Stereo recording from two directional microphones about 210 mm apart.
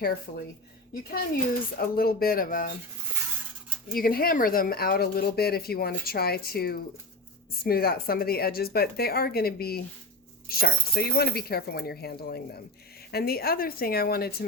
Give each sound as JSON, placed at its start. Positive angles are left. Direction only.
{"t": 0.0, "sound": "speech", "side_deg": 45}
{"t": 1.8, "sound": "speech", "side_deg": 45}
{"t": 3.9, "sound": "speech", "side_deg": 45}